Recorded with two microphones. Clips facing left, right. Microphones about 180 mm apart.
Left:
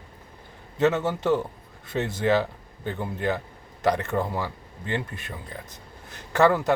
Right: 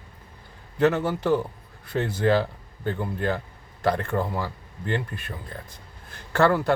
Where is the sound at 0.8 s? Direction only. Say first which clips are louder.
Right 1 dB; 20° left (ahead or behind).